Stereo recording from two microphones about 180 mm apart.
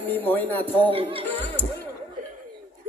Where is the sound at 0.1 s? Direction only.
10° left (ahead or behind).